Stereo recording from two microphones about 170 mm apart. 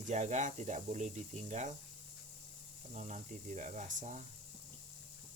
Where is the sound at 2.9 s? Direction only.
40° right (ahead or behind).